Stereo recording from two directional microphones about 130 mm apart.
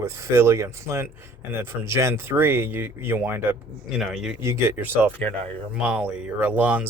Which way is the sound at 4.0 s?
5° right (ahead or behind).